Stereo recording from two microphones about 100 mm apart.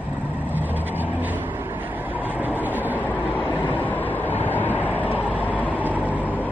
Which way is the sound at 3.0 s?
15° left (ahead or behind).